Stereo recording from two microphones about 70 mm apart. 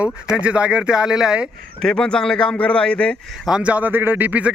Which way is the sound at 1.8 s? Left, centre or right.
Centre.